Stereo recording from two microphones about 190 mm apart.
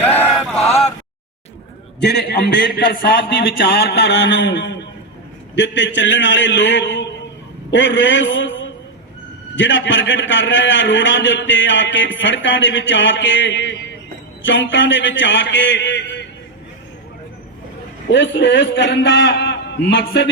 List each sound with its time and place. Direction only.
0.0 s chant: 10° left (ahead or behind)
2.0 s a man's voice: 65° left (ahead or behind)
3.8 s a man's voice: 65° left (ahead or behind)
18.1 s a man's voice: 70° left (ahead or behind)